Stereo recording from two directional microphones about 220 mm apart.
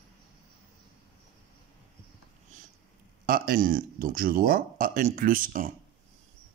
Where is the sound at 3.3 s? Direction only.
40° right (ahead or behind).